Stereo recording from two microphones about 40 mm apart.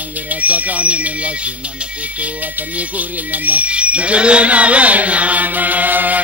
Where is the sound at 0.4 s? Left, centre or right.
Right.